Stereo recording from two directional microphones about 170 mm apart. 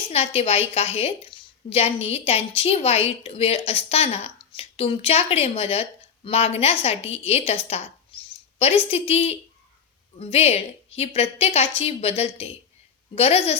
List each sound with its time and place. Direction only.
0.1 s a woman's voice: 35° left (ahead or behind)
8.1 s a sound: 30° left (ahead or behind)
8.5 s a woman's voice: 35° left (ahead or behind)